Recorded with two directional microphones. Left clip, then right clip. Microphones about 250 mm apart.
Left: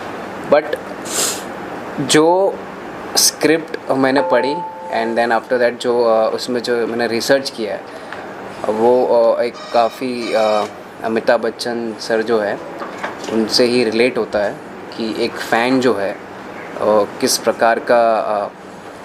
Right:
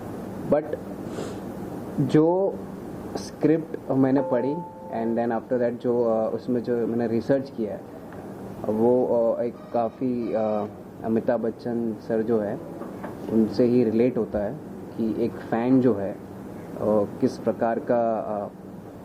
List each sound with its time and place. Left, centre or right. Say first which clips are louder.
0.5 s speech: left 10 dB; centre
2.2 s speech: left 10 dB; left
3.1 s speech: left 10 dB; centre
5.9 s speech: left 8 dB; left
6.3 s speech: left 8 dB; centre
8.6 s speech: left 8 dB; centre
9.4 s speech: left 10 dB; centre
16.7 s speech: left 9 dB; centre
17.2 s speech: left 9 dB; centre